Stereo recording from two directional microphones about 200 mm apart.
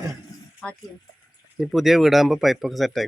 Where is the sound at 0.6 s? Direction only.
5° left (ahead or behind).